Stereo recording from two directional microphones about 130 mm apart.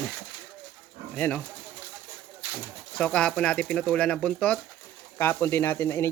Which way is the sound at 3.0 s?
5° left (ahead or behind).